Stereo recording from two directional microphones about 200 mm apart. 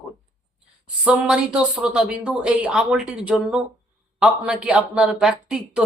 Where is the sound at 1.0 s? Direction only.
5° right (ahead or behind).